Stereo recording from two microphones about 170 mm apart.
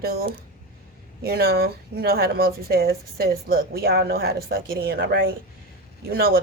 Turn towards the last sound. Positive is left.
turn(degrees=-65)  # may be behind; listen again after turning